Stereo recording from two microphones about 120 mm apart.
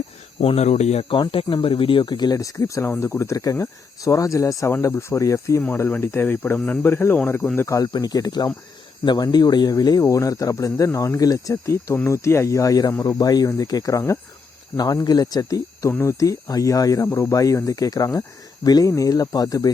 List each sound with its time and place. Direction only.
0.3 s speech: 55° left (ahead or behind)
1.1 s speech: 45° left (ahead or behind); by 19.7 s 30° left (ahead or behind)